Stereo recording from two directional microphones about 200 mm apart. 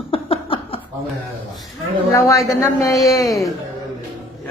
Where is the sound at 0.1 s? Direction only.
25° left (ahead or behind).